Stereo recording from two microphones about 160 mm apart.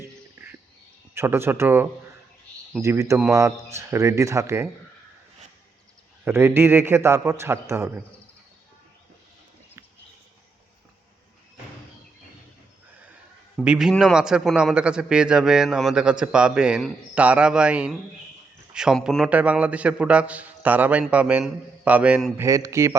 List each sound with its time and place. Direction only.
0.0 s a sound: 15° right (ahead or behind)
1.1 s a man's voice: 15° right (ahead or behind)
6.2 s a man's voice: 15° right (ahead or behind)
13.6 s a man's voice: 5° right (ahead or behind)
22.4 s speech: 20° right (ahead or behind)